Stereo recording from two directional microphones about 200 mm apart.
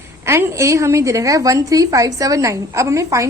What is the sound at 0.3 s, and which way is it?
A woman's voice, 15° right (ahead or behind).